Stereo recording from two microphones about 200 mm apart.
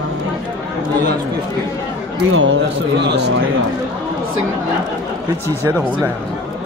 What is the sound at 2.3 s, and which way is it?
Speech, 75° right (ahead or behind).